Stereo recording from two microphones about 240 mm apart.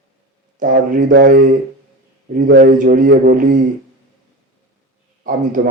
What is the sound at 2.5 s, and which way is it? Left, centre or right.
Speech, right.